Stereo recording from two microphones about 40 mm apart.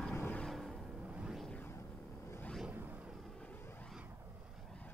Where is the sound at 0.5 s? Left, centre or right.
Centre.